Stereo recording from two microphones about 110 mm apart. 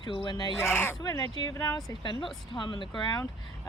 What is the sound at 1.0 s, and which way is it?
Speech, 35° left (ahead or behind).